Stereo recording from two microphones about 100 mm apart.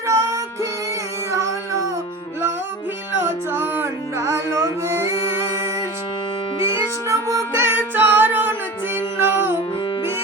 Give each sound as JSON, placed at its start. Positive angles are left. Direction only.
{"t": 0.1, "sound": "music", "side_deg": -35}
{"t": 3.2, "sound": "music", "side_deg": -20}
{"t": 7.6, "sound": "music", "side_deg": -20}